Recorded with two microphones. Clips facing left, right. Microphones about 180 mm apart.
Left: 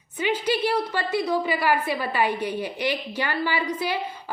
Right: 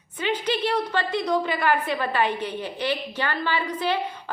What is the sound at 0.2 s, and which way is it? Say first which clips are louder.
A woman's voice: left 1 dB; 10° left (ahead or behind).